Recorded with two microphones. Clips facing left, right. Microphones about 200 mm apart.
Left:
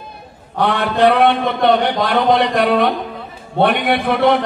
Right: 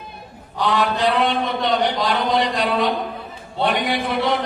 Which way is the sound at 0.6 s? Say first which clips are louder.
Left 5 dB; 60° left (ahead or behind).